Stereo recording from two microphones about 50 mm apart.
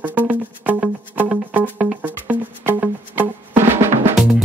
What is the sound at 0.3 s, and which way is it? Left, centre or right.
Music, right.